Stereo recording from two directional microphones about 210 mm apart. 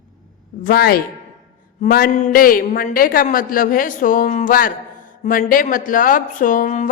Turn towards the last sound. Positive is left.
turn(degrees=40)  # may be behind; listen again after turning